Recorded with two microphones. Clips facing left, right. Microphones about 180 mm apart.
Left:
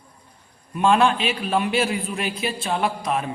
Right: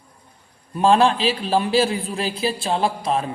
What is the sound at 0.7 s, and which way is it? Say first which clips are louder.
A man's voice: right 2 dB; 35° right (ahead or behind).